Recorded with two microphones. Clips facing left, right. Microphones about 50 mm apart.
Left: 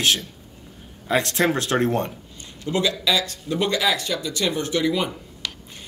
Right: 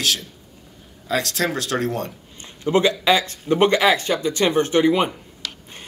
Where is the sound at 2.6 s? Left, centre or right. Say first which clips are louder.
Right 5 dB; right.